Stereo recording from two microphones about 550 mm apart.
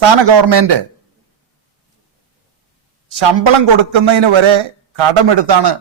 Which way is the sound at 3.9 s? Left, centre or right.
Right.